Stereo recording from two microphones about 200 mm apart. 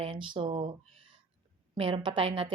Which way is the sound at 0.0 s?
25° right (ahead or behind).